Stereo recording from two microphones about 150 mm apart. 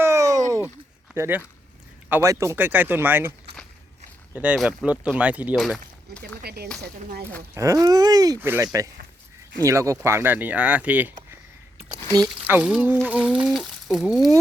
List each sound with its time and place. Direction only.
0.0 s a sound: 20° right (ahead or behind)
1.1 s speech: 15° right (ahead or behind)
4.4 s speech: 5° right (ahead or behind)
6.4 s speech: 90° right
7.5 s speech: 20° right (ahead or behind)
12.5 s speech: 10° right (ahead or behind)